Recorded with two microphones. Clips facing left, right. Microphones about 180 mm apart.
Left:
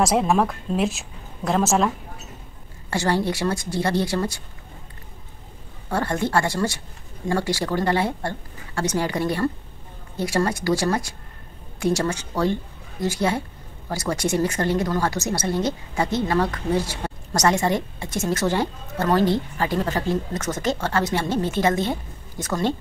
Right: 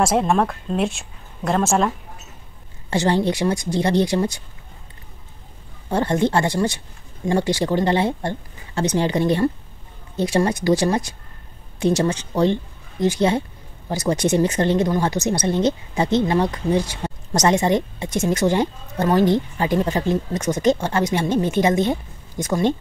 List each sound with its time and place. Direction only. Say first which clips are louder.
0.0 s a woman's voice: right 1 dB; centre (ahead or behind)
2.9 s speech: right 3 dB; 20° right (ahead or behind)
5.9 s speech: right 5 dB; 20° right (ahead or behind)